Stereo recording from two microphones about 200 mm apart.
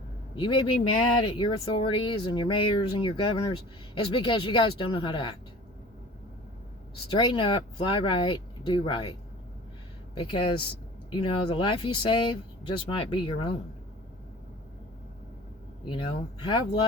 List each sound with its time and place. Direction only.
0.3 s speech: 25° left (ahead or behind)
7.1 s speech: 25° left (ahead or behind)
10.2 s speech: 25° left (ahead or behind)
15.8 s speech: 25° left (ahead or behind)